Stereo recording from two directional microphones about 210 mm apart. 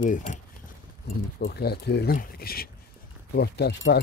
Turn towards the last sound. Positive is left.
turn(degrees=50)  # may be behind; listen again after turning